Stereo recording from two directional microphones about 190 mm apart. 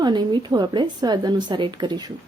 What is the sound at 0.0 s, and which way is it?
A woman's voice, 25° right (ahead or behind).